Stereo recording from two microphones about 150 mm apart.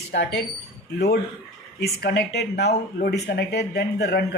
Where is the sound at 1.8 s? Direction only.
90° left.